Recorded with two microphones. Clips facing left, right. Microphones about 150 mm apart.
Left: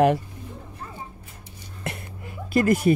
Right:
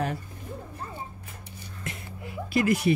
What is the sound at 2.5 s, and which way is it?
Speech, 45° left (ahead or behind).